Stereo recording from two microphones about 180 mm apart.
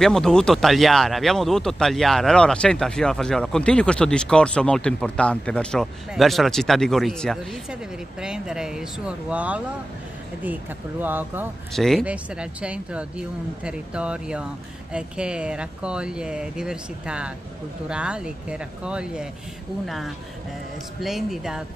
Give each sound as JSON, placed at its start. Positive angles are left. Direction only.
{"t": 0.0, "sound": "speech", "side_deg": 5}
{"t": 11.7, "sound": "speech", "side_deg": 0}
{"t": 21.0, "sound": "speech", "side_deg": 0}